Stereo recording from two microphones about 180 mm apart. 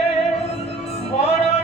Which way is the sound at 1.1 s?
35° left (ahead or behind).